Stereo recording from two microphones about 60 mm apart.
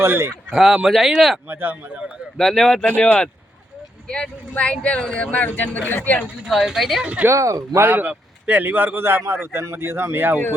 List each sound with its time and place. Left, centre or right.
0.0 s a man's voice: right
0.5 s speech: centre
1.5 s a man's voice: right
2.4 s speech: centre
2.8 s speech: left
6.4 s a woman's voice: centre
7.0 s speech: right
7.3 s speech: right
7.9 s a man's voice: right